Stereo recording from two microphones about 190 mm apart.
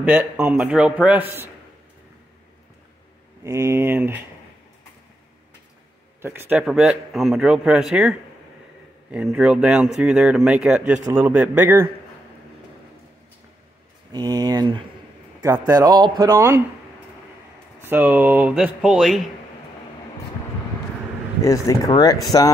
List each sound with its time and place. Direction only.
0.0 s speech: 10° right (ahead or behind)
3.4 s speech: 15° right (ahead or behind)
6.2 s a man's voice: 10° right (ahead or behind)
14.1 s a man's voice: 20° right (ahead or behind)
17.8 s speech: 10° right (ahead or behind)
21.4 s speech: 15° left (ahead or behind)